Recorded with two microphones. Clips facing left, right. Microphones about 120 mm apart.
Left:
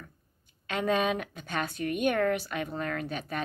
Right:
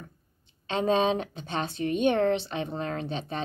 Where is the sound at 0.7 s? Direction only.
25° right (ahead or behind).